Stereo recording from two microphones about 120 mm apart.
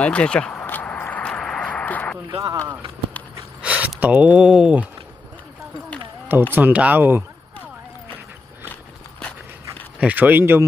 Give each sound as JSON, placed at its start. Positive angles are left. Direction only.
{"t": 0.0, "sound": "a sound", "side_deg": 10}
{"t": 2.3, "sound": "speech", "side_deg": -30}
{"t": 3.6, "sound": "speech", "side_deg": -10}
{"t": 6.5, "sound": "speech", "side_deg": -15}
{"t": 9.9, "sound": "speech", "side_deg": -15}